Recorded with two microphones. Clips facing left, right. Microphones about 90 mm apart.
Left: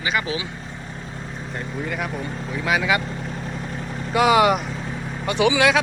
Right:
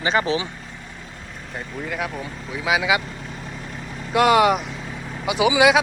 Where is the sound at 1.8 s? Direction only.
Centre (ahead or behind).